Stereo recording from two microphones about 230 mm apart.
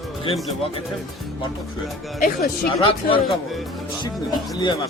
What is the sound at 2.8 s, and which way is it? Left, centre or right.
Speech, left.